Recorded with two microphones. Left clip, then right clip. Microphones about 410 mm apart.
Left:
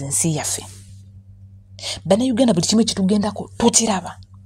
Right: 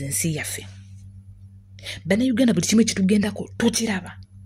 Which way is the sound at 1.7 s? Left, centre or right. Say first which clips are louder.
Left 6 dB; right.